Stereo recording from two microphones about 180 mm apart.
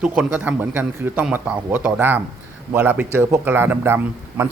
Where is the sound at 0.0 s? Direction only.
5° right (ahead or behind).